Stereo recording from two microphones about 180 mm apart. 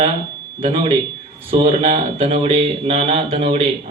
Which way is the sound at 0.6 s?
30° right (ahead or behind).